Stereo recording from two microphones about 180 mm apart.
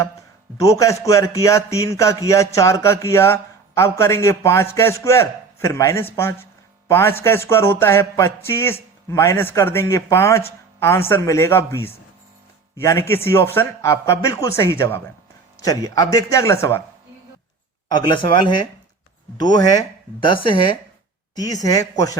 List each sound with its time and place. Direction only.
0.5 s a man's voice: 20° left (ahead or behind)
17.8 s speech: 25° left (ahead or behind)